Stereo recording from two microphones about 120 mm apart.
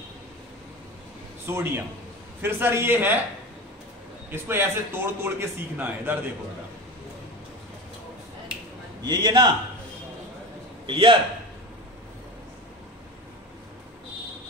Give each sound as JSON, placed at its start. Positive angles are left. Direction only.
{"t": 1.4, "sound": "a man's voice", "side_deg": -20}
{"t": 4.3, "sound": "a man's voice", "side_deg": -20}
{"t": 9.0, "sound": "a man's voice", "side_deg": -35}
{"t": 10.9, "sound": "a man's voice", "side_deg": -45}